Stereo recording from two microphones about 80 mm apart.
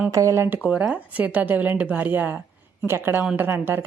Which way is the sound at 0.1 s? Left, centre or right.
Right.